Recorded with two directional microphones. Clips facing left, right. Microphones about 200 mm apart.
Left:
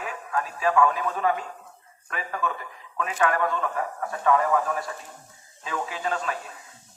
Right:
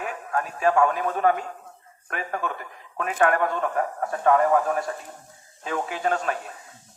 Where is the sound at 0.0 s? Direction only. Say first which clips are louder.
Right 2 dB; 50° right (ahead or behind).